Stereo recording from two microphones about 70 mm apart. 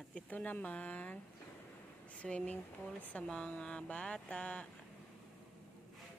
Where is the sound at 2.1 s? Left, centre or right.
Centre.